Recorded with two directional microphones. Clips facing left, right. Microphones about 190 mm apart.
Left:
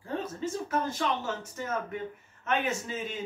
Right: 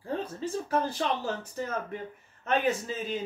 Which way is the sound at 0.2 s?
35° right (ahead or behind).